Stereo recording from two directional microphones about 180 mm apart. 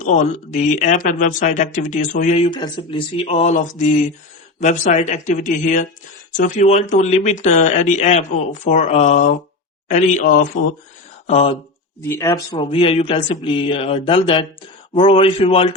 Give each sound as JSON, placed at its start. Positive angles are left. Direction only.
{"t": 0.0, "sound": "speech", "side_deg": 45}
{"t": 2.5, "sound": "speech", "side_deg": 25}
{"t": 3.2, "sound": "speech", "side_deg": 40}
{"t": 11.3, "sound": "speech", "side_deg": 35}
{"t": 12.0, "sound": "speech", "side_deg": 15}